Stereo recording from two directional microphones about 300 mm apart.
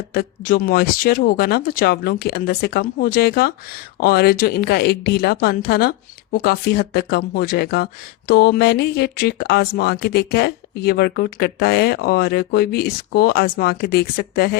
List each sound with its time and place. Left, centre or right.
0.1 s speech: left